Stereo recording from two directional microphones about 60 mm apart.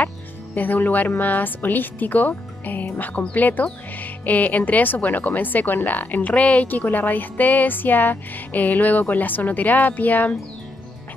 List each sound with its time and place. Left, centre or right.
0.6 s a woman's voice: left